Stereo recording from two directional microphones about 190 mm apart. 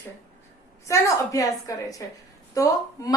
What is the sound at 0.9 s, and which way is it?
A woman's voice, 15° left (ahead or behind).